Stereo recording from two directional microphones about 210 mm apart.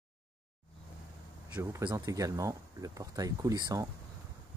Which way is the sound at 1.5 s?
15° right (ahead or behind).